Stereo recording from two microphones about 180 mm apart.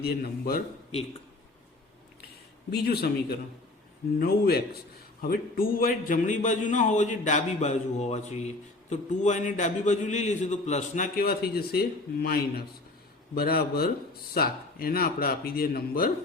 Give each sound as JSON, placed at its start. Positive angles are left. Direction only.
{"t": 0.2, "sound": "speech", "side_deg": 55}
{"t": 2.6, "sound": "a man's voice", "side_deg": 65}